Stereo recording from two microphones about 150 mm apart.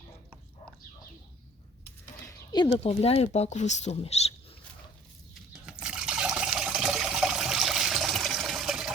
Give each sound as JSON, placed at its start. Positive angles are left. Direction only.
{"t": 2.2, "sound": "a sound", "side_deg": 25}
{"t": 2.6, "sound": "speech", "side_deg": 40}
{"t": 5.6, "sound": "liquid", "side_deg": -5}